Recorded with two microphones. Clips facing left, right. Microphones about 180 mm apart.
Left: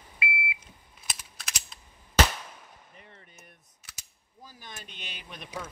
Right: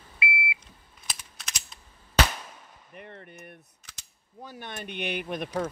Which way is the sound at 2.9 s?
60° right (ahead or behind).